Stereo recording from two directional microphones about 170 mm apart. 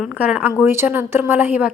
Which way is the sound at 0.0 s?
5° right (ahead or behind).